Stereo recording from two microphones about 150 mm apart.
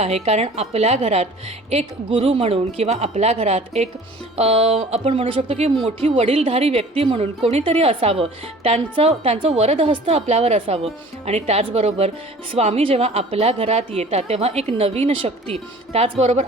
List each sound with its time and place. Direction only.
0.0 s a woman's voice: 45° right (ahead or behind)